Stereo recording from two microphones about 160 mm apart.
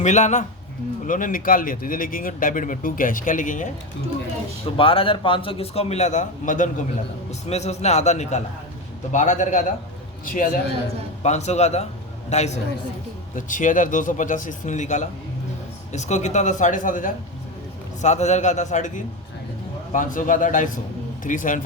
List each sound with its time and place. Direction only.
0.0 s a man's voice: 50° left (ahead or behind)
4.8 s a man's voice: 35° left (ahead or behind); by 6.7 s 55° left (ahead or behind)
7.3 s a man's voice: 45° left (ahead or behind)
11.2 s a man's voice: 45° left (ahead or behind)
18.0 s a man's voice: 45° left (ahead or behind)